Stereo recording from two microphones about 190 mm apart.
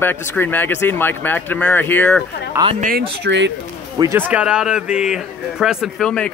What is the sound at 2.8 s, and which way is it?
Speech, 50° right (ahead or behind).